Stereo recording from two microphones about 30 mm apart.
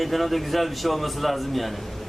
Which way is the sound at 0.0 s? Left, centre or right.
Centre.